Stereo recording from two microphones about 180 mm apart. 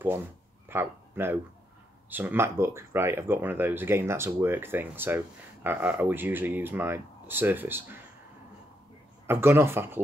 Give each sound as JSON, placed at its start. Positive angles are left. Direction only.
{"t": 0.7, "sound": "speech", "side_deg": -15}
{"t": 9.3, "sound": "speech", "side_deg": -15}